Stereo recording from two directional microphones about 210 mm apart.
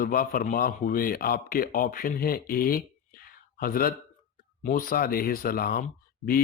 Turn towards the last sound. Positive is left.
turn(degrees=45)  # may be behind; listen again after turning